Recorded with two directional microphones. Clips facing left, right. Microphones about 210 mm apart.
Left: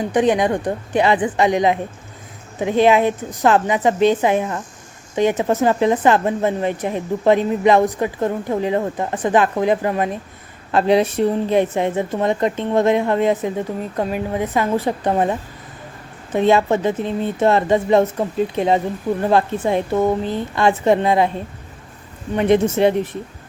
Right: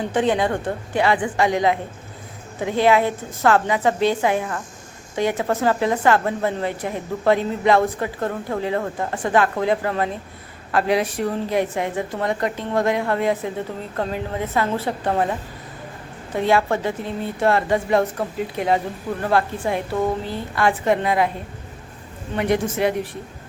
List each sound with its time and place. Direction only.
0.1 s a woman's voice: 15° left (ahead or behind)
22.4 s speech: 20° left (ahead or behind)